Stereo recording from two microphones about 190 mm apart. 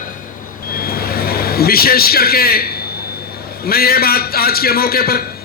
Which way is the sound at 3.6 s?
55° left (ahead or behind).